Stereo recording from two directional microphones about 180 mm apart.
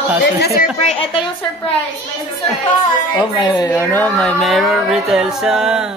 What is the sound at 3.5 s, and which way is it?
Speech, 15° left (ahead or behind).